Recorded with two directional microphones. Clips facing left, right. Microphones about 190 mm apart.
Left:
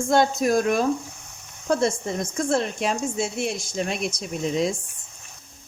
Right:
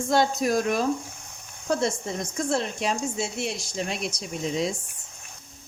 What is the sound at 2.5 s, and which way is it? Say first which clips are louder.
Speech: left 3 dB; 55° left (ahead or behind).